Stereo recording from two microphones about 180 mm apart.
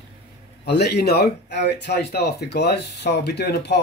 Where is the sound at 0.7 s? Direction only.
65° left (ahead or behind).